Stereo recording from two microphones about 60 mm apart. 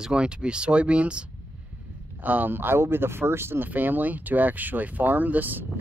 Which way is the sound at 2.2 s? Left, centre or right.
Right.